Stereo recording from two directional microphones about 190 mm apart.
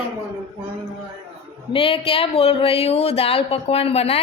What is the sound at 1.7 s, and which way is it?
Speech, 30° left (ahead or behind).